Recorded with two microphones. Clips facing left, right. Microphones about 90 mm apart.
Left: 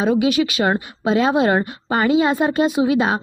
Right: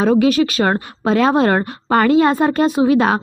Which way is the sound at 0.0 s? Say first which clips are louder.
Right 3 dB; 45° right (ahead or behind).